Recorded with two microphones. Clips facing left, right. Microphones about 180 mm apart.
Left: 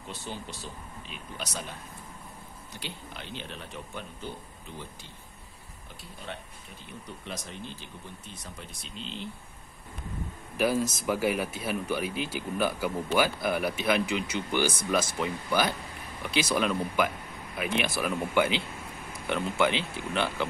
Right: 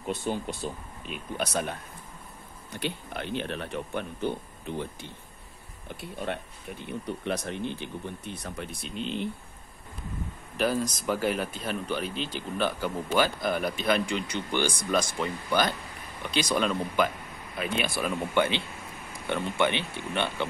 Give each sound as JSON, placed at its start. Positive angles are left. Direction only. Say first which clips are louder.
{"t": 0.1, "sound": "speech", "louder": "right 9 dB", "side_deg": -50}
{"t": 7.1, "sound": "speech", "louder": "right 9 dB", "side_deg": -60}
{"t": 10.6, "sound": "speech", "louder": "left 1 dB", "side_deg": 5}